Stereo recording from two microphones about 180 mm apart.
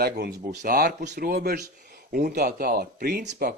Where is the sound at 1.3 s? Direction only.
60° right (ahead or behind).